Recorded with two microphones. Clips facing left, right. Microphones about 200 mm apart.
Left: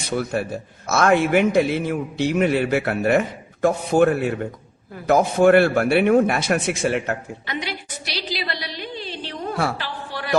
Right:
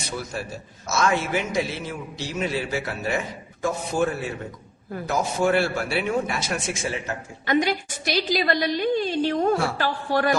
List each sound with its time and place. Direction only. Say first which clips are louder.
0.2 s a man's voice: left 8 dB; 60° left (ahead or behind)
7.4 s a woman's voice: right 11 dB; 45° right (ahead or behind)